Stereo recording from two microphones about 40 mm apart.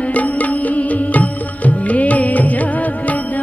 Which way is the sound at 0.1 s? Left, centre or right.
Left.